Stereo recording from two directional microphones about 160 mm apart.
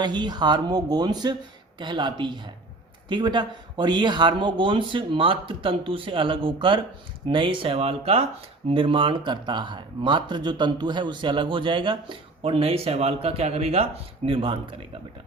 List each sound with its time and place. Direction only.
0.0 s speech: 25° right (ahead or behind)